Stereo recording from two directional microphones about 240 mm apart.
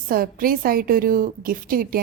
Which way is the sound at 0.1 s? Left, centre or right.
Right.